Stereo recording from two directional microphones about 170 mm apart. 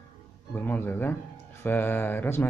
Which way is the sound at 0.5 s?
10° left (ahead or behind).